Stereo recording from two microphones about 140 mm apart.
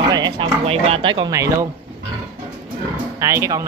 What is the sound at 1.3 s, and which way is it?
Speech, 20° right (ahead or behind).